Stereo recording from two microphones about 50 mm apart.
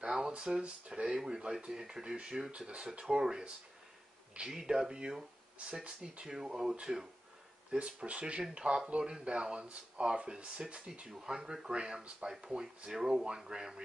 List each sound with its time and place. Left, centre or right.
0.3 s speech: right
1.0 s speech: centre
7.7 s speech: right